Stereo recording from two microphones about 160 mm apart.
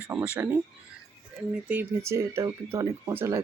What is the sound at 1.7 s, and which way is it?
Speech, 15° right (ahead or behind).